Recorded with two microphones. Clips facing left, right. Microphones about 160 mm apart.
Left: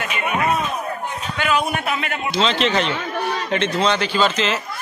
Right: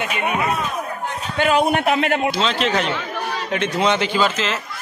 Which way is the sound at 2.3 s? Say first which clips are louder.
Left 1 dB; 5° right (ahead or behind).